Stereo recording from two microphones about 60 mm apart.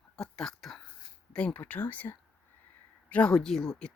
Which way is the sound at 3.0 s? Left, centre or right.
Left.